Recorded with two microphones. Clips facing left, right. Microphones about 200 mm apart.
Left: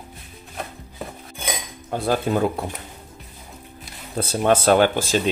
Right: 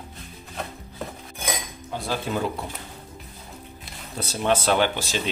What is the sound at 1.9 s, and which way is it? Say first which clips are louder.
Speech: left 6 dB; 50° left (ahead or behind).